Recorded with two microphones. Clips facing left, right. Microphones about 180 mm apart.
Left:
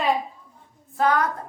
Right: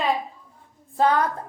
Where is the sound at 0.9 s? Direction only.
30° right (ahead or behind).